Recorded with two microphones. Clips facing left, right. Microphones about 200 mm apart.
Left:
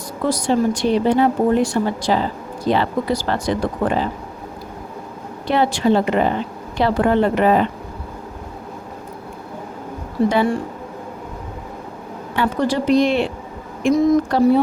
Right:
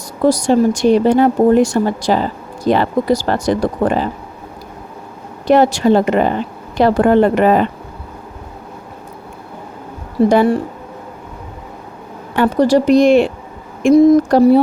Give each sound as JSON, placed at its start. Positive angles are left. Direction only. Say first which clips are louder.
{"t": 0.3, "sound": "speech", "louder": "right 6 dB", "side_deg": -45}
{"t": 5.5, "sound": "speech", "louder": "right 6 dB", "side_deg": -45}
{"t": 10.2, "sound": "a woman's voice", "louder": "right 6 dB", "side_deg": -40}
{"t": 12.4, "sound": "a woman's voice", "louder": "right 7 dB", "side_deg": -40}